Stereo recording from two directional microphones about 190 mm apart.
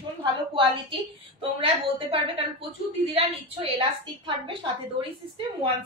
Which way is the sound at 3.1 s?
30° right (ahead or behind).